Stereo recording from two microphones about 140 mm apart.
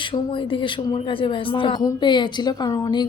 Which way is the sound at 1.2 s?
35° left (ahead or behind).